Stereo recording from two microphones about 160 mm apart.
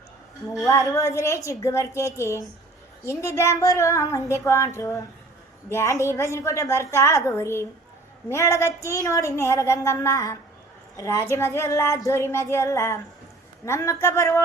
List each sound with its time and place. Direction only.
0.7 s a woman's voice: 20° left (ahead or behind)